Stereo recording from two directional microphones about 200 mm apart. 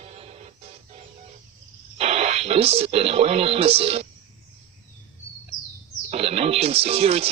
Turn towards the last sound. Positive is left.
turn(degrees=-30)  # may be behind; listen again after turning